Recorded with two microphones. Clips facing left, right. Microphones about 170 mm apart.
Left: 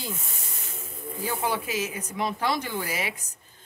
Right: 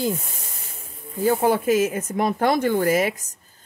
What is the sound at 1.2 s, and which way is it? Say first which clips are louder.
Speech: right 10 dB; 45° right (ahead or behind).